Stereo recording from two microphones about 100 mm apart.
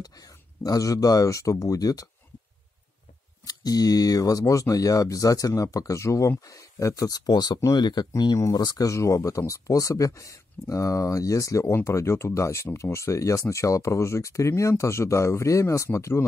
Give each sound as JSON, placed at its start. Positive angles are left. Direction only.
{"t": 0.0, "sound": "speech", "side_deg": 35}
{"t": 3.4, "sound": "speech", "side_deg": 40}